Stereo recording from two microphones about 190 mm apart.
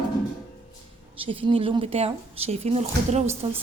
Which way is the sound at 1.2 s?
25° right (ahead or behind).